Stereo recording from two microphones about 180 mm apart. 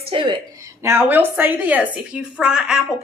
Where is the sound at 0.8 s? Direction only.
10° right (ahead or behind).